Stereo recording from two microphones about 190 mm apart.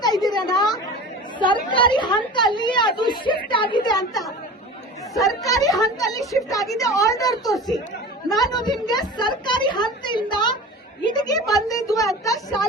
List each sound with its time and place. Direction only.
0.0 s a sound: 20° left (ahead or behind)
1.7 s a woman's voice: 25° left (ahead or behind)
5.2 s a woman's voice: 20° left (ahead or behind)